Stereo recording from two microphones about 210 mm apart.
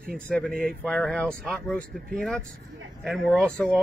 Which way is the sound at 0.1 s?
5° left (ahead or behind).